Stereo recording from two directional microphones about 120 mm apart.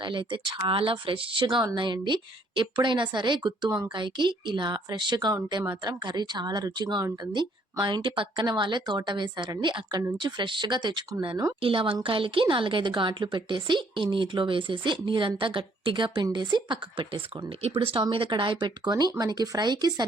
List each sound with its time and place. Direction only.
0.0 s speech: 45° right (ahead or behind)
11.6 s a woman's voice: 50° right (ahead or behind)